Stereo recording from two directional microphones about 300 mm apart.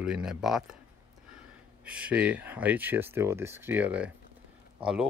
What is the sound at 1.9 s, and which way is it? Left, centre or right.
Speech, centre.